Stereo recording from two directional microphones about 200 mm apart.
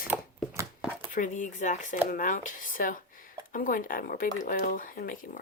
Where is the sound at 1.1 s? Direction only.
40° left (ahead or behind).